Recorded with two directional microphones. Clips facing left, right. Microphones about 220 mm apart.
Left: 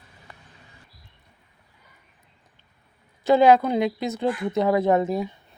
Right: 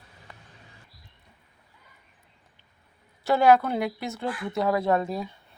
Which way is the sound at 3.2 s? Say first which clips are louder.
Left 3 dB; 20° left (ahead or behind).